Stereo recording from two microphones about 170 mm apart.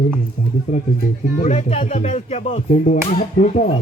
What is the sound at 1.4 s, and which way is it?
Speech, 40° left (ahead or behind).